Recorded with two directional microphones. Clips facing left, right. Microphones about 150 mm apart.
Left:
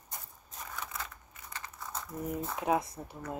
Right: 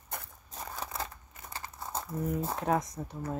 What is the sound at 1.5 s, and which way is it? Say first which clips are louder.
Crumpling: right 4 dB; 30° right (ahead or behind).